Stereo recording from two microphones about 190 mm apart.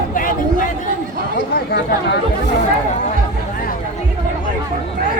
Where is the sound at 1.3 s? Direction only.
60° left (ahead or behind).